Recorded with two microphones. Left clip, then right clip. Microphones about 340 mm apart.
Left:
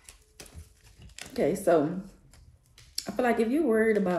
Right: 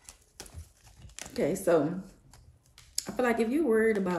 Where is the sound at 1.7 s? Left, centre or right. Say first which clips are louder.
Left 2 dB; centre.